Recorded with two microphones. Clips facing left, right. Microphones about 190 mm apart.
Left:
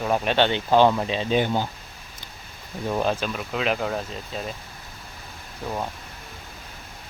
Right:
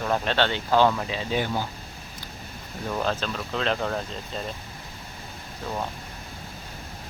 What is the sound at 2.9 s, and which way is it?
Speech, 15° left (ahead or behind).